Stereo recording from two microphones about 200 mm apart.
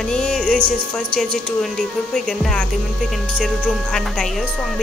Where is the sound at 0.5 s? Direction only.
45° right (ahead or behind).